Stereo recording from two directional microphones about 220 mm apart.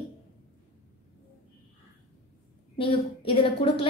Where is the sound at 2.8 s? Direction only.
25° left (ahead or behind).